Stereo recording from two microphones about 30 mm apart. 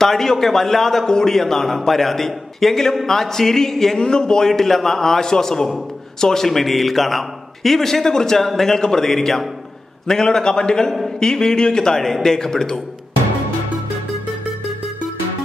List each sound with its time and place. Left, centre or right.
0.0 s a man's voice: centre
4.5 s a man's voice: centre; by 12.0 s left
12.0 s a man's voice: centre